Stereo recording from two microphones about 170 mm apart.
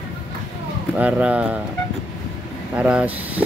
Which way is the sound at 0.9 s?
5° right (ahead or behind).